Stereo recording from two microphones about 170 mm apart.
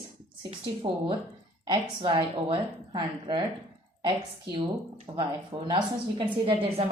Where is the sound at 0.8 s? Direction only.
30° right (ahead or behind).